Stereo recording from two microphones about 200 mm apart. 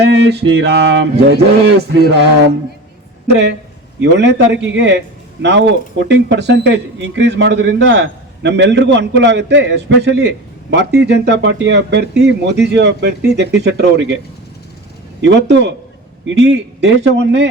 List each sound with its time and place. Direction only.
0.0 s speech: 55° right (ahead or behind)
4.0 s speech: 60° right (ahead or behind)
15.2 s speech: 60° right (ahead or behind)